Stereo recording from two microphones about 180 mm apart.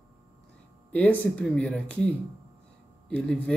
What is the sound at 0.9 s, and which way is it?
Speech, 10° left (ahead or behind).